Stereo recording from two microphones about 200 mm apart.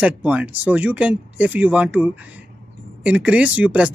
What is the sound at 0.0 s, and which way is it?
Speech, 5° right (ahead or behind).